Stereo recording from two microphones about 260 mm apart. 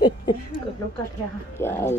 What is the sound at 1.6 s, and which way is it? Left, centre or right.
Speech, centre.